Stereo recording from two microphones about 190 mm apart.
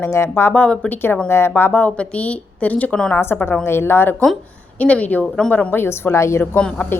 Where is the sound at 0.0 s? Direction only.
15° left (ahead or behind).